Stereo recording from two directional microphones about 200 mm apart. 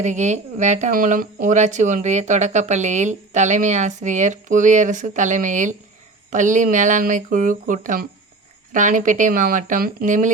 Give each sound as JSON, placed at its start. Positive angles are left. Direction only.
{"t": 0.0, "sound": "speech", "side_deg": -35}